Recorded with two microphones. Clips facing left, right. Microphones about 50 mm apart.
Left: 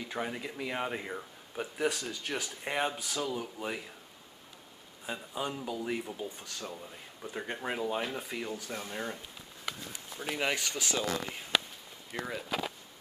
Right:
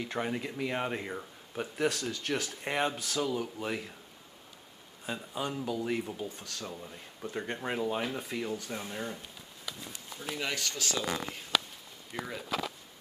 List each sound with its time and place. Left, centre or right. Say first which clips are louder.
0.2 s speech: right 2 dB; centre
2.6 s speech: left 1 dB; centre
5.0 s speech: right 1 dB; centre
6.2 s speech: right 1 dB; centre
6.6 s speech: even; centre
8.9 s speech: left 2 dB; centre
9.7 s speech: left 2 dB; left